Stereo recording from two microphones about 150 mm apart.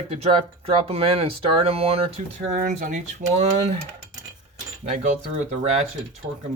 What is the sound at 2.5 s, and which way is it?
Speech, 60° right (ahead or behind).